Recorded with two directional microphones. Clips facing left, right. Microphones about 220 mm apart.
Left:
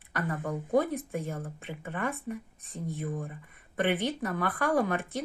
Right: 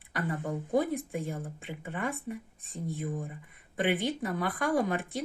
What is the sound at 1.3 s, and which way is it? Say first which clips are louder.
Speech: even; 15° right (ahead or behind).